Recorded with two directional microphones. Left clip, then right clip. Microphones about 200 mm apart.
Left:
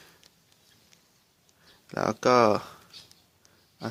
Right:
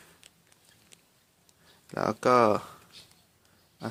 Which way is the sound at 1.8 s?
5° left (ahead or behind).